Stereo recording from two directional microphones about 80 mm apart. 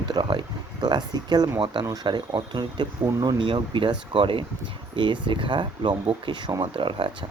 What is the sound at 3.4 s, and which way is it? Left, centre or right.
Speech, right.